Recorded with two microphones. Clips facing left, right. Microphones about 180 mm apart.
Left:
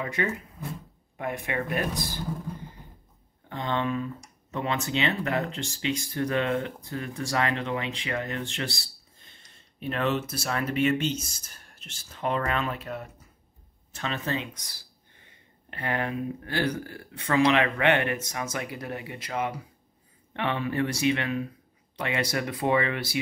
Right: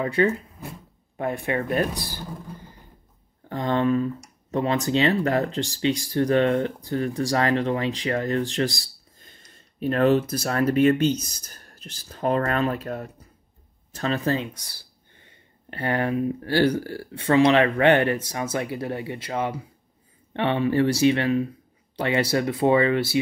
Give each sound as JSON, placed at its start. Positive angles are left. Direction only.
{"t": 0.0, "sound": "speech", "side_deg": -30}
{"t": 3.4, "sound": "speech", "side_deg": -40}
{"t": 15.7, "sound": "speech", "side_deg": -35}